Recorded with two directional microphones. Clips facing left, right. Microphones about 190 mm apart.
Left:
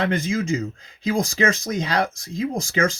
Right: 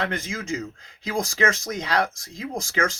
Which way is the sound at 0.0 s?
20° left (ahead or behind).